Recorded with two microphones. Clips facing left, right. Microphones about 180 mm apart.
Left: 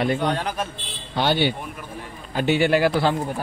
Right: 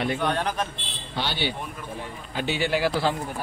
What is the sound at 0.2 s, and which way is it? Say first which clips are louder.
Speech: left 1 dB; 10° left (ahead or behind).